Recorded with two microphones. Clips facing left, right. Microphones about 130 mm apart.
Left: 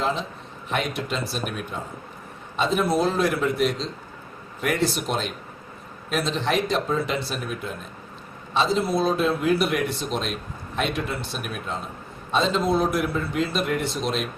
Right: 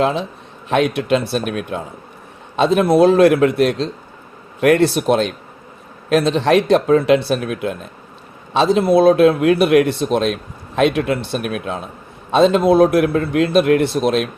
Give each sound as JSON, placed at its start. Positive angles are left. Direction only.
{"t": 0.0, "sound": "a man's voice", "side_deg": -65}
{"t": 2.6, "sound": "a man's voice", "side_deg": -70}
{"t": 12.3, "sound": "a man's voice", "side_deg": -65}